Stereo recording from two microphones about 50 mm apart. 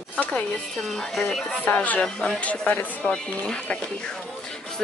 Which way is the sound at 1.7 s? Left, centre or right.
Left.